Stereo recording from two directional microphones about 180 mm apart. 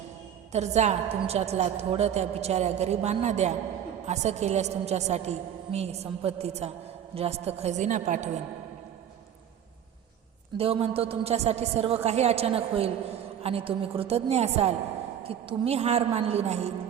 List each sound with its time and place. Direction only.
0.5 s a woman's voice: 40° right (ahead or behind)
10.6 s a woman's voice: 30° right (ahead or behind)